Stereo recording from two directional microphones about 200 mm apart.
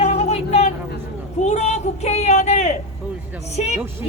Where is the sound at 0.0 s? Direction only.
35° left (ahead or behind).